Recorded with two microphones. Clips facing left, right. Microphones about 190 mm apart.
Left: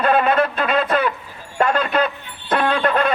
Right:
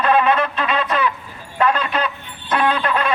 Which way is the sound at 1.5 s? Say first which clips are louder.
Left 1 dB; 50° left (ahead or behind).